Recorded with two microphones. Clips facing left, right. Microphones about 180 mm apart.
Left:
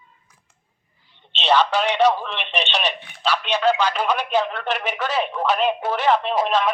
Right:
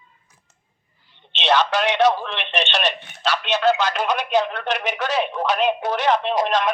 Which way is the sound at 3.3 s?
10° left (ahead or behind).